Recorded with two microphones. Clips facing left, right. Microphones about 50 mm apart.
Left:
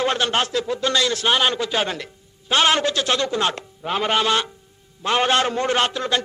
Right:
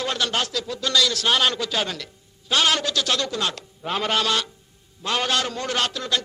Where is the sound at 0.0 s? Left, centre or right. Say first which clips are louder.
Left 4 dB; left.